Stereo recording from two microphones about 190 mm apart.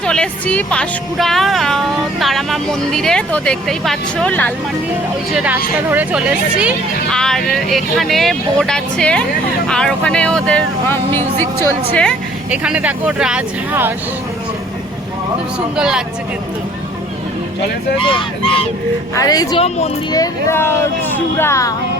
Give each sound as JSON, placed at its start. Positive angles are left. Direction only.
{"t": 0.0, "sound": "speech", "side_deg": 5}
{"t": 5.3, "sound": "speech", "side_deg": -5}
{"t": 12.5, "sound": "speech", "side_deg": -5}
{"t": 15.7, "sound": "speech", "side_deg": -5}
{"t": 18.0, "sound": "speech", "side_deg": 25}
{"t": 19.5, "sound": "speech", "side_deg": 35}
{"t": 20.1, "sound": "speech", "side_deg": 15}